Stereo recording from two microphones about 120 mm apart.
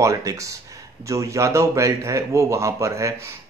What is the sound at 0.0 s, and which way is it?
Speech, 25° right (ahead or behind).